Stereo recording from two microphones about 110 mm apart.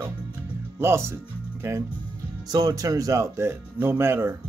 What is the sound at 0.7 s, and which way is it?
Speech, 25° right (ahead or behind).